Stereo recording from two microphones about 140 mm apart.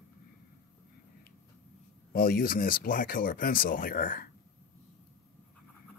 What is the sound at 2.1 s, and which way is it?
Speech, 90° left.